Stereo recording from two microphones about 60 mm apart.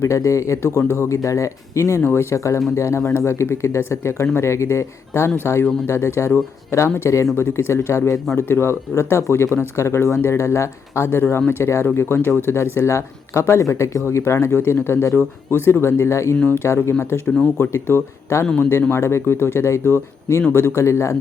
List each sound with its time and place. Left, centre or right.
0.0 s speech: left